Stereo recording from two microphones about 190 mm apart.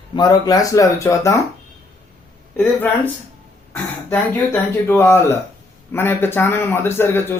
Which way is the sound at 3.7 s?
10° left (ahead or behind).